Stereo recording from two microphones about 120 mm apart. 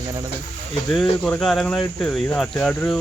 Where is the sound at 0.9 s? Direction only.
5° left (ahead or behind).